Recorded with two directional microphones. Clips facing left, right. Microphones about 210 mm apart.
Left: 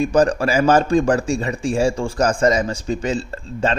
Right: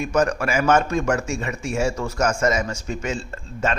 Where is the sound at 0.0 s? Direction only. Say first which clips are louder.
Left 5 dB; 30° left (ahead or behind).